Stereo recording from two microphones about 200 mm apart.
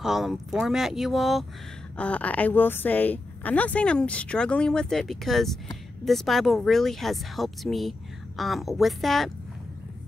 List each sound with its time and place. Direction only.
0.0 s speech: centre (ahead or behind)